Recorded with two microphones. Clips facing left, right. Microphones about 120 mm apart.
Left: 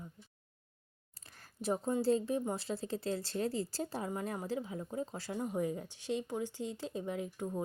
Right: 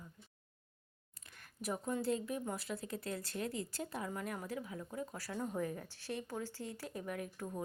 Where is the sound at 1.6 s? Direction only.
30° left (ahead or behind).